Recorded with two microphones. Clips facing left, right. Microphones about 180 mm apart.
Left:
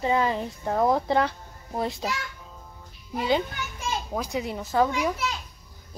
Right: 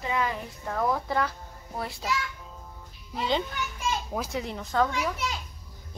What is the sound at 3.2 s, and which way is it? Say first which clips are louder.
A child's voice: left 3 dB; 5° left (ahead or behind).